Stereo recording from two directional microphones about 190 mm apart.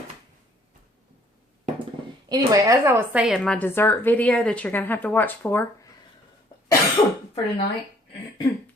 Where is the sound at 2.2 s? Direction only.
20° right (ahead or behind).